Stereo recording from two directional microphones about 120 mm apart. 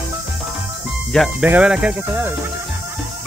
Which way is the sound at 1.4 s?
10° right (ahead or behind).